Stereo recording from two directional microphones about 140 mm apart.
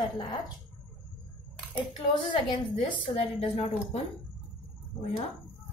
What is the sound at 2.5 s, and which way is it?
A woman's voice, 35° left (ahead or behind).